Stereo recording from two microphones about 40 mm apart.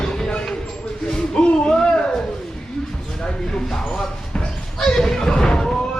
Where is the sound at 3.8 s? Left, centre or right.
Left.